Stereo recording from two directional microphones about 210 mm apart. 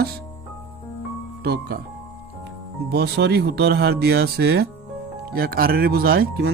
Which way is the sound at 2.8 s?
50° right (ahead or behind).